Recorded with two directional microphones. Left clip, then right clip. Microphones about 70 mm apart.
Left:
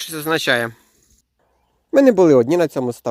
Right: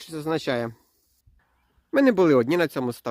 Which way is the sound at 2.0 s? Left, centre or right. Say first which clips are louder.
Left 7 dB; left.